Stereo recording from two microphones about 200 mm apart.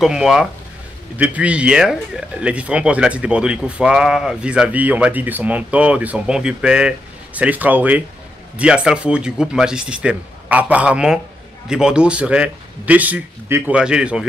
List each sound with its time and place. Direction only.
0.0 s speech: centre (ahead or behind)